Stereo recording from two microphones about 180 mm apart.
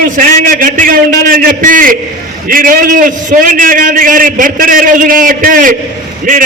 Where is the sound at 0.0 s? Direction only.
45° right (ahead or behind).